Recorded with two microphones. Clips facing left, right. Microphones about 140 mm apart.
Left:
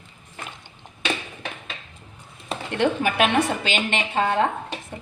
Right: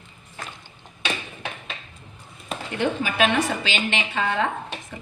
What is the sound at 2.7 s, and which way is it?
A woman's voice, 60° left (ahead or behind).